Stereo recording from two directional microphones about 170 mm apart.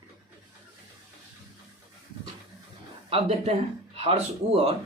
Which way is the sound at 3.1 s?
35° right (ahead or behind).